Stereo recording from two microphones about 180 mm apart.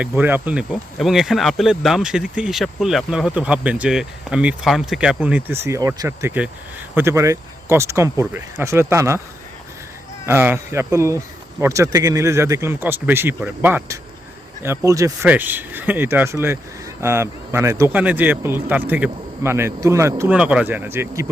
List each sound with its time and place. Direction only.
0.0 s speech: 10° right (ahead or behind)
10.2 s speech: 10° right (ahead or behind)